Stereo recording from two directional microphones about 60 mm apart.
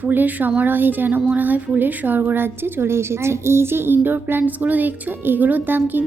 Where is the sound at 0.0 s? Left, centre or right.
Right.